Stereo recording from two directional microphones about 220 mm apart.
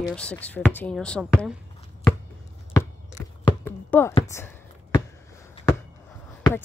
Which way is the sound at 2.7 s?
15° left (ahead or behind).